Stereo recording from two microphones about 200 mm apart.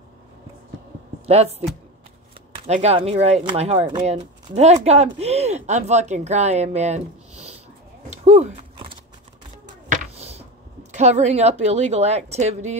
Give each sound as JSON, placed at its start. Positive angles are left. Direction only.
{"t": 1.2, "sound": "speech", "side_deg": -30}
{"t": 2.5, "sound": "speech", "side_deg": -30}
{"t": 8.1, "sound": "a sound", "side_deg": -35}
{"t": 10.9, "sound": "speech", "side_deg": -35}